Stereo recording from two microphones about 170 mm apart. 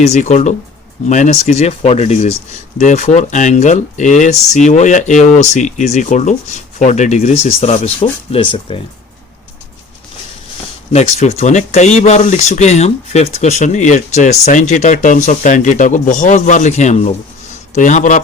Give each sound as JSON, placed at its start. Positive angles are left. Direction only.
{"t": 0.0, "sound": "speech", "side_deg": 40}
{"t": 10.9, "sound": "speech", "side_deg": 40}